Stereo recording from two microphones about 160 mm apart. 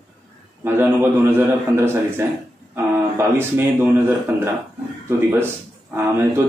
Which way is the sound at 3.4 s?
15° right (ahead or behind).